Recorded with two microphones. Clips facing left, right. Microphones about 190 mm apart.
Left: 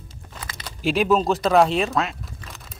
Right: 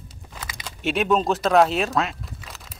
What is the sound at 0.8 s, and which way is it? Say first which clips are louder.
Speech: left 2 dB; centre (ahead or behind).